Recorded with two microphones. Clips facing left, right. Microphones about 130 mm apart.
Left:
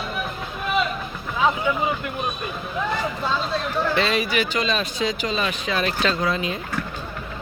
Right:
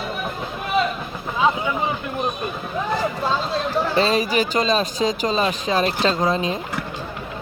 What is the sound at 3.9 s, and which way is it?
Speech, 40° right (ahead or behind).